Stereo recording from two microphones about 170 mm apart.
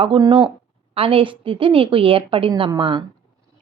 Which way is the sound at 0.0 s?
30° right (ahead or behind).